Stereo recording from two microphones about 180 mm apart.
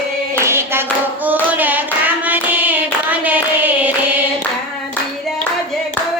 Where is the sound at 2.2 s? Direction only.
10° right (ahead or behind).